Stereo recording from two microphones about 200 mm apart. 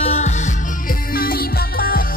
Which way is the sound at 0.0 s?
35° left (ahead or behind).